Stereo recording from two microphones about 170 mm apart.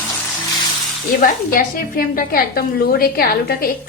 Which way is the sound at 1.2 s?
55° left (ahead or behind).